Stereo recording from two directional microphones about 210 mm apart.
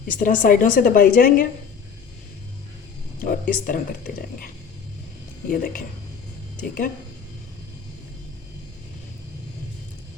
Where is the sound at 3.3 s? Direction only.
40° left (ahead or behind).